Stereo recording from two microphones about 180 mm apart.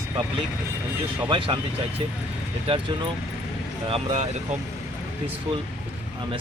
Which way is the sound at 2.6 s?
30° right (ahead or behind).